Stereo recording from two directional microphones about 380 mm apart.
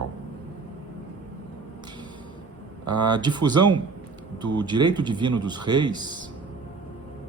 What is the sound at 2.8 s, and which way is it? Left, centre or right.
Speech, right.